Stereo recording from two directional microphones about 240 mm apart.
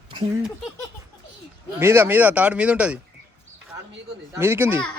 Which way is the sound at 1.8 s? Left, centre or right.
Centre.